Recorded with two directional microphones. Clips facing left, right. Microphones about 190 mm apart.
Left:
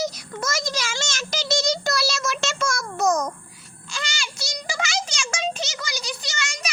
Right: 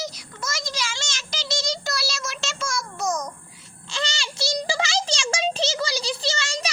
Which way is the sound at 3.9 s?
30° right (ahead or behind).